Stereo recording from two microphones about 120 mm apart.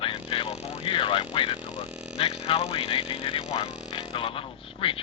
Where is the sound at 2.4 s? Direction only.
50° left (ahead or behind).